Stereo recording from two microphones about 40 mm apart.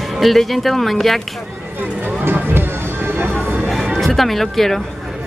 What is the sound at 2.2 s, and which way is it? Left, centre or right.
Music, right.